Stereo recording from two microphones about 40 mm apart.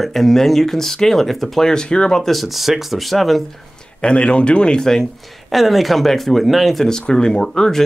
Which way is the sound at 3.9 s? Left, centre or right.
Left.